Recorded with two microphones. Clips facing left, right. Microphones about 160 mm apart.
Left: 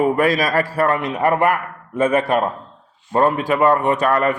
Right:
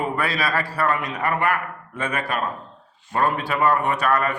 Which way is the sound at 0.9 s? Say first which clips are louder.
Left 5 dB; 60° left (ahead or behind).